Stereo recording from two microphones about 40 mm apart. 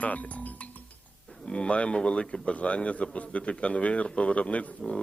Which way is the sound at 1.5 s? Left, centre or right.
Left.